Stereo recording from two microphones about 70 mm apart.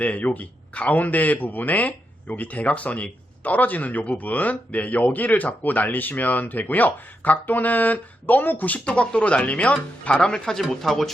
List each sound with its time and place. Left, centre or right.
0.0 s a man's voice: centre